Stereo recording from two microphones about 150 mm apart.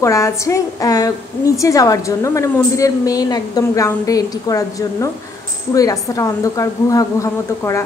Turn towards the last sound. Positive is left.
turn(degrees=20)  # may be behind; listen again after turning